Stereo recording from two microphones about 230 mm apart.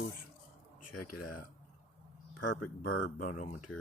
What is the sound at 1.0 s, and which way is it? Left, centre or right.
Speech, left.